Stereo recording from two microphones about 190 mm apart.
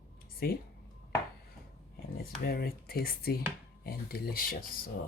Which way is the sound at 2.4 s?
55° left (ahead or behind).